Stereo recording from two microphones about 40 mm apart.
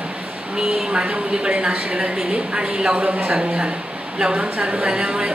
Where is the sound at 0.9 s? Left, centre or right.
Right.